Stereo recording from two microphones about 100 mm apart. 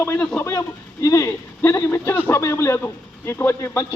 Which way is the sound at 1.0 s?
35° left (ahead or behind).